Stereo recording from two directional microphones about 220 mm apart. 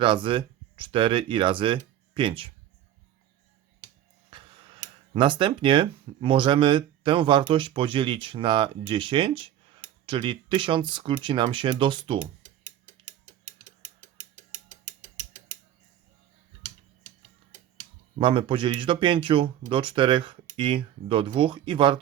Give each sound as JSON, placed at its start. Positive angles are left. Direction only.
{"t": 0.0, "sound": "speech", "side_deg": -20}
{"t": 4.3, "sound": "tick-tock", "side_deg": -25}
{"t": 5.1, "sound": "speech", "side_deg": -20}
{"t": 18.2, "sound": "speech", "side_deg": -25}